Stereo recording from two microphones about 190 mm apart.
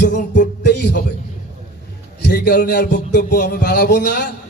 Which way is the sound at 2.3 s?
65° left (ahead or behind).